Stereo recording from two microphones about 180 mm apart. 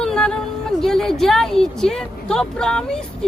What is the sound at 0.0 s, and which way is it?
A woman's voice, 5° left (ahead or behind).